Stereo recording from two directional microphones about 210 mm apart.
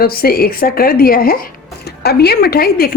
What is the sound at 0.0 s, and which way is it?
A woman's voice, 45° left (ahead or behind).